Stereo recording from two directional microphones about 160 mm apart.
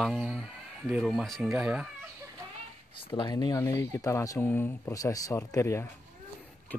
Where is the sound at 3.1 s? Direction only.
30° left (ahead or behind).